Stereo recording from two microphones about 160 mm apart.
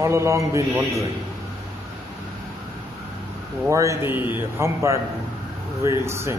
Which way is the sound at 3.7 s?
20° right (ahead or behind).